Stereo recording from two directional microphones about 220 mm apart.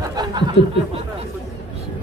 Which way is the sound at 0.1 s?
20° right (ahead or behind).